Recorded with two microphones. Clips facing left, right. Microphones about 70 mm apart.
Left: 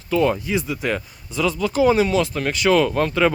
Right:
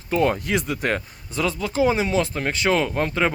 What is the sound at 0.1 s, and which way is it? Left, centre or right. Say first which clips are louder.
Speech: left 2 dB; right.